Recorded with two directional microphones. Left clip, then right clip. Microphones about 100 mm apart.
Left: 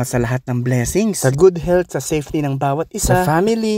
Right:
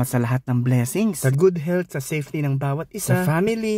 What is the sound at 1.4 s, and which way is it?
Speech, 50° left (ahead or behind).